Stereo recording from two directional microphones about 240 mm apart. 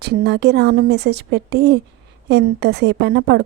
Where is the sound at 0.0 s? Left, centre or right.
Right.